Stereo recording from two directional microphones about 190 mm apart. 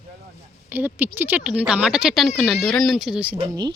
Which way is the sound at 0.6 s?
10° right (ahead or behind).